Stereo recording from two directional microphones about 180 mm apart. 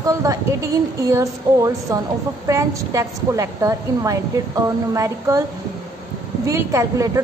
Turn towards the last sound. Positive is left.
turn(degrees=-15)  # may be behind; listen again after turning